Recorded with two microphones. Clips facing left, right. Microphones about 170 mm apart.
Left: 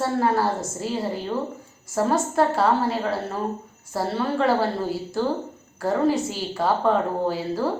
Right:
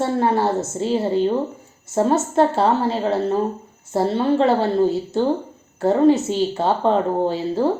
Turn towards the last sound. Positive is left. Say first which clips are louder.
# right 4 dB
turn(degrees=-25)  # may be behind; listen again after turning